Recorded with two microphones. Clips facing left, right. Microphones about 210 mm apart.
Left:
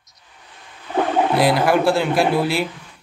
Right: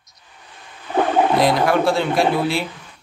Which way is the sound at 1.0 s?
55° right (ahead or behind).